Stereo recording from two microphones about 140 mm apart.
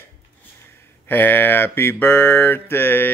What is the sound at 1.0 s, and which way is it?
Mantra, 15° left (ahead or behind).